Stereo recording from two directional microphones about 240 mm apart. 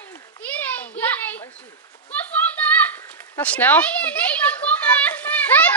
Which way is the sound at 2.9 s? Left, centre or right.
Centre.